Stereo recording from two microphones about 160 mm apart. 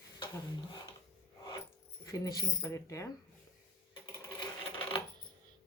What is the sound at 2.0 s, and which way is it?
Speech, 20° left (ahead or behind).